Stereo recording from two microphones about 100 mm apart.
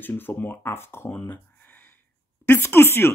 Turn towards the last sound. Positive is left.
turn(degrees=25)  # may be behind; listen again after turning